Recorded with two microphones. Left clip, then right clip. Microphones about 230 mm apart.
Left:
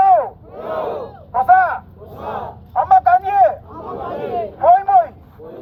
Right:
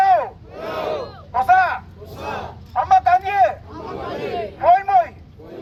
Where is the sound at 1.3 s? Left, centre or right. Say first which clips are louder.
Left 3 dB; right.